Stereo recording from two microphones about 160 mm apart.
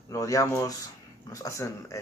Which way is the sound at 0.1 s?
20° left (ahead or behind).